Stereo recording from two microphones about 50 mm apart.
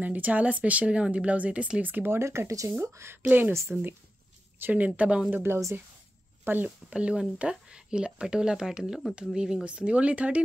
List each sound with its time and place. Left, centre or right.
0.0 s speech: right
2.0 s speech: right
2.8 s speech: right
3.2 s speech: right
4.6 s speech: right
5.3 s speech: right
6.9 s speech: right